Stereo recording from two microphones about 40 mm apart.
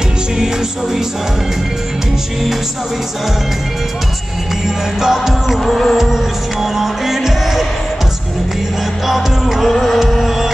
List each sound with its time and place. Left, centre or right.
5.0 s music: centre
5.5 s music: centre
5.9 s music: centre
9.0 s music: centre